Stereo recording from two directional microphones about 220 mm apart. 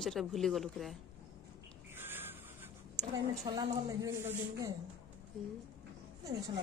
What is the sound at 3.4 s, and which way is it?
A woman's voice, 20° right (ahead or behind).